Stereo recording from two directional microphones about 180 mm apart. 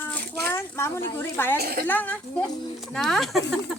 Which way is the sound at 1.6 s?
60° right (ahead or behind).